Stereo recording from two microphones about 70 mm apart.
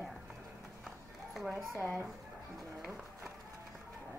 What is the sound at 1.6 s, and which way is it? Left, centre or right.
Speech, right.